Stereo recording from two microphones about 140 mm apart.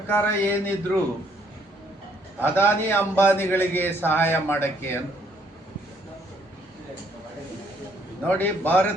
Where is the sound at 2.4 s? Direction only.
15° left (ahead or behind).